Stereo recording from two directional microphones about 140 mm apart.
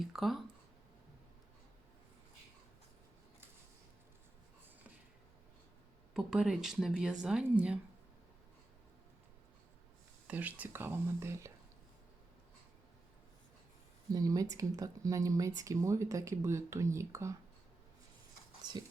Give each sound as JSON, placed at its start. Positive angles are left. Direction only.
{"t": 0.0, "sound": "speech", "side_deg": 0}
{"t": 6.1, "sound": "speech", "side_deg": -5}
{"t": 10.2, "sound": "speech", "side_deg": -10}
{"t": 14.1, "sound": "speech", "side_deg": -25}
{"t": 18.6, "sound": "a sound", "side_deg": -30}